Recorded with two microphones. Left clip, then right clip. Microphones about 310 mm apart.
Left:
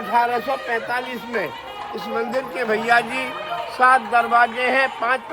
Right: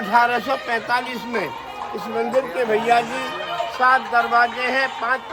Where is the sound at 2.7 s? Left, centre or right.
Left.